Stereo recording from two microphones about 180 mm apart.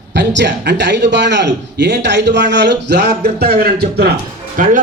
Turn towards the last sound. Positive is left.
turn(degrees=-50)  # may be behind; listen again after turning